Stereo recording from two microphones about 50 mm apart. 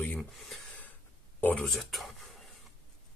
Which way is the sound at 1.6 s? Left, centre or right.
Centre.